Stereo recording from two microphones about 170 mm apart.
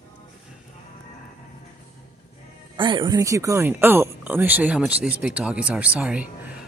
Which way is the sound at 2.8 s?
30° right (ahead or behind).